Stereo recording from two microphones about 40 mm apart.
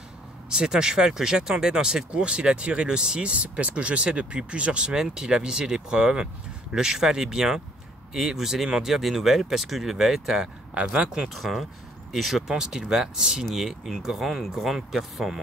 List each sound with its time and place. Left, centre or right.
0.5 s speech: centre
10.7 s speech: right
11.2 s speech: centre